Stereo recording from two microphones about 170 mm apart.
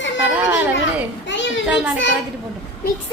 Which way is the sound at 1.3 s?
90° left.